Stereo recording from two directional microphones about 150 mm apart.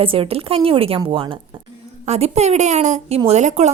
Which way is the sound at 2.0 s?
45° right (ahead or behind).